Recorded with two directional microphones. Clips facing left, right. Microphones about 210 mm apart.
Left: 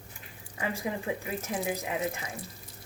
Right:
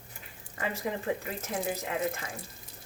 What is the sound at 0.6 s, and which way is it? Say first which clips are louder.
Speech: even; 10° left (ahead or behind).